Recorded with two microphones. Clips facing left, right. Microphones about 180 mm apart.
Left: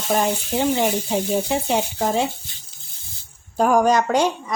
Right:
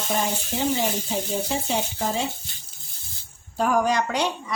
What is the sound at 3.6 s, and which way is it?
Speech, 45° left (ahead or behind).